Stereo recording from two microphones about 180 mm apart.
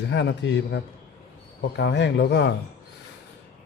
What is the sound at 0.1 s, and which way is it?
Speech, 75° left (ahead or behind).